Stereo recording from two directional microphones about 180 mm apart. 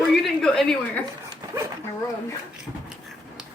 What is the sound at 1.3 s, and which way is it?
Dog, 15° right (ahead or behind).